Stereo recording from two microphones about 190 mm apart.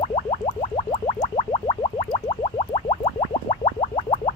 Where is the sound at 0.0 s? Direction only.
35° left (ahead or behind).